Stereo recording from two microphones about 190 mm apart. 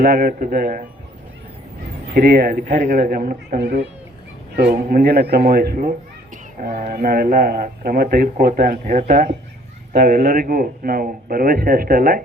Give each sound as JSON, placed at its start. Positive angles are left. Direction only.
{"t": 0.0, "sound": "speech", "side_deg": -50}
{"t": 2.1, "sound": "speech", "side_deg": -50}
{"t": 2.6, "sound": "speech", "side_deg": -40}